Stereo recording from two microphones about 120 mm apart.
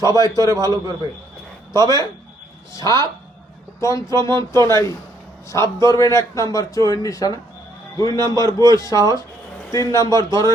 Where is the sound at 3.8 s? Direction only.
25° left (ahead or behind).